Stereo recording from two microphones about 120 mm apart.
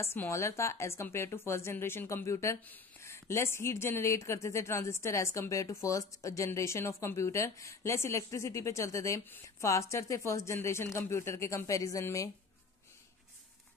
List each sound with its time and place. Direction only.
0.0 s a woman's voice: 20° left (ahead or behind)